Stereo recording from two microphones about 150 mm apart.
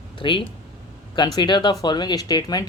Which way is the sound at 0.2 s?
35° left (ahead or behind).